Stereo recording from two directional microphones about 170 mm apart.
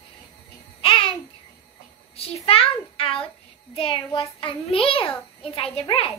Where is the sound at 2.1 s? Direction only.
35° left (ahead or behind).